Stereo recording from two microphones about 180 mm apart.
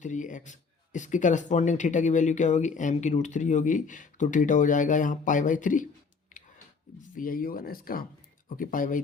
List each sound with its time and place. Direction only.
0.0 s speech: 45° left (ahead or behind)
7.1 s speech: 50° left (ahead or behind)